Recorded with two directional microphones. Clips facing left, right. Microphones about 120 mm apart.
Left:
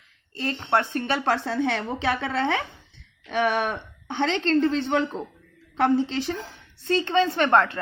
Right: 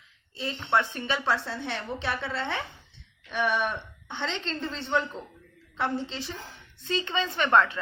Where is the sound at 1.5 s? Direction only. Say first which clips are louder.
Left 8 dB; 90° left.